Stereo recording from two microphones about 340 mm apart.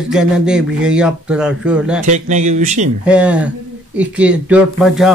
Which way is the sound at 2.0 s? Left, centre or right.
Right.